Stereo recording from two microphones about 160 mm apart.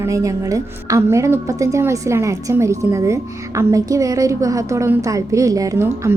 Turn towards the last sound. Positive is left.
turn(degrees=-20)  # may be behind; listen again after turning